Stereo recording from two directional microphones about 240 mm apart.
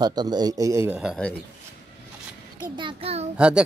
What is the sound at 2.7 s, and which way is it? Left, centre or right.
Speech, right.